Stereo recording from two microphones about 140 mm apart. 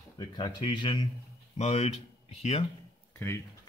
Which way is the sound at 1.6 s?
50° left (ahead or behind).